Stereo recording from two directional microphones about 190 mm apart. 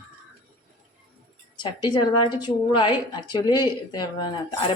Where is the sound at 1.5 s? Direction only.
25° left (ahead or behind).